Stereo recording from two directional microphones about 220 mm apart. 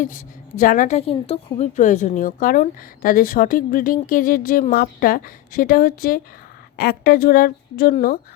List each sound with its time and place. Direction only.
0.0 s a woman's voice: 35° left (ahead or behind)